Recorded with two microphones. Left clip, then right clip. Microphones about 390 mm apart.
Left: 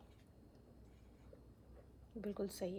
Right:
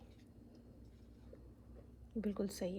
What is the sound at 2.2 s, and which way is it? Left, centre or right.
Speech, centre.